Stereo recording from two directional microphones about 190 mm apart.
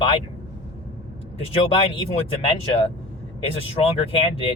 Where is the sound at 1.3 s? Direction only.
30° left (ahead or behind).